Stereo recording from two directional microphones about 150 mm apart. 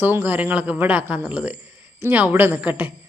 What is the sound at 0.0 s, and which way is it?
A woman's voice, 15° right (ahead or behind).